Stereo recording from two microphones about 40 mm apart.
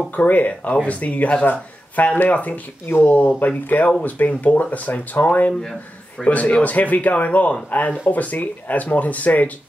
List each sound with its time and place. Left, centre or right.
0.1 s speech: left
2.9 s speech: left
5.5 s speech: centre
6.2 s speech: left